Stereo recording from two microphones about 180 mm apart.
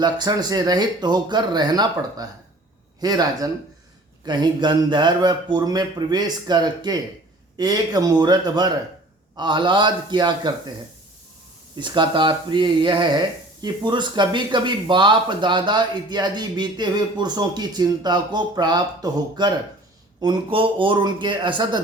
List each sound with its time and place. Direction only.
0.0 s speech: 20° right (ahead or behind)
11.8 s speech: 25° right (ahead or behind)